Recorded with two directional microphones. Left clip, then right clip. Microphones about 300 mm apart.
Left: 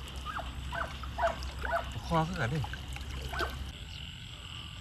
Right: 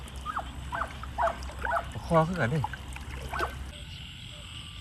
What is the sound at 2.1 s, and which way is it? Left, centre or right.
Speech, centre.